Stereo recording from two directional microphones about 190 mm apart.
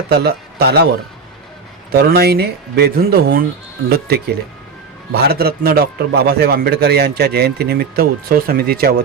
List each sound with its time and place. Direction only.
0.1 s a man's voice: 55° right (ahead or behind)
1.9 s a man's voice: 55° right (ahead or behind)